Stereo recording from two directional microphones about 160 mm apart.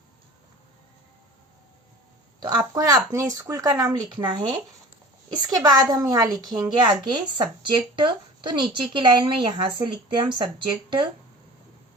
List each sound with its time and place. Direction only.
2.4 s a woman's voice: 25° right (ahead or behind)